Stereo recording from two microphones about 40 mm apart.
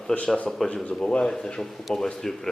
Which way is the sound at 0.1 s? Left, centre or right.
Left.